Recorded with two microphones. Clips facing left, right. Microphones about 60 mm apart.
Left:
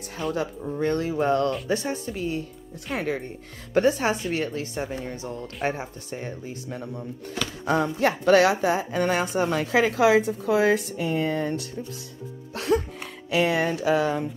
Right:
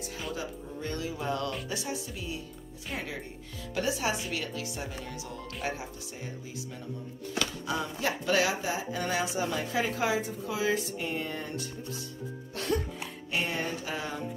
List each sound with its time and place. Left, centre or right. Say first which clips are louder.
0.3 s speech: left 12 dB; left
3.7 s speech: left 9 dB; left